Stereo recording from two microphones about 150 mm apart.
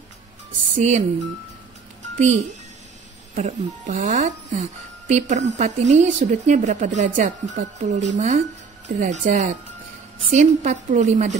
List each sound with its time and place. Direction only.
0.7 s speech: 50° right (ahead or behind)
2.1 s speech: 50° right (ahead or behind)
8.9 s speech: 60° right (ahead or behind)